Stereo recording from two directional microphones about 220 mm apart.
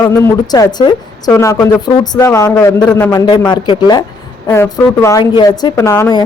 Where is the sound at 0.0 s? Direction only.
10° left (ahead or behind).